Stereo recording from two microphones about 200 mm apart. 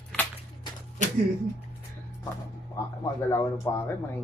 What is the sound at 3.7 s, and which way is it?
Speech, 10° left (ahead or behind).